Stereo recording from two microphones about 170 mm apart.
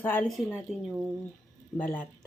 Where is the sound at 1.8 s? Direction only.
10° left (ahead or behind).